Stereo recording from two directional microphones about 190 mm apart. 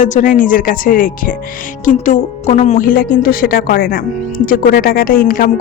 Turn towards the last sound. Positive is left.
turn(degrees=50)  # may be behind; listen again after turning